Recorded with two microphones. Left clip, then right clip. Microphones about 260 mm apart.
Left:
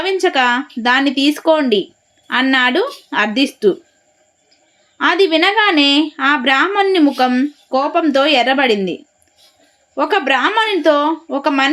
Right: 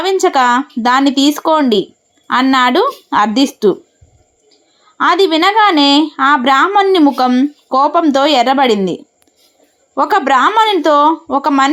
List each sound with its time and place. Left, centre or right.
0.0 s a woman's voice: centre
4.9 s a woman's voice: centre